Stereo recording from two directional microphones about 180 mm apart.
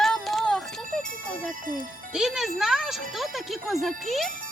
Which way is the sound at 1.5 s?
50° right (ahead or behind).